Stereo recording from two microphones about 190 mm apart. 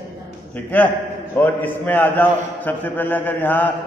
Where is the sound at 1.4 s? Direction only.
10° left (ahead or behind).